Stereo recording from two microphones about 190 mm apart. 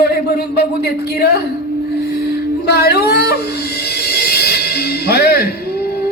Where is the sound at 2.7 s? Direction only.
55° left (ahead or behind).